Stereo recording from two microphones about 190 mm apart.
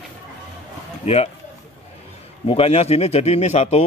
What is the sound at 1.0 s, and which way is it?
Speech, 35° left (ahead or behind).